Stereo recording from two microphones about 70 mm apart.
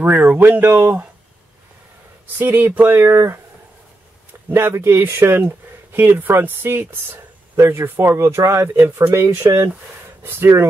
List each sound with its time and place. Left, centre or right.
0.4 s speech: right
2.3 s speech: right
4.5 s speech: right